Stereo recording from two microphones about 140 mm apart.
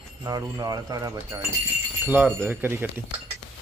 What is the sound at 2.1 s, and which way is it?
Speech, 15° right (ahead or behind).